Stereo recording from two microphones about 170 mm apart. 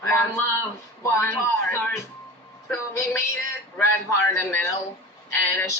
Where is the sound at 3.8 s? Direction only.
15° left (ahead or behind).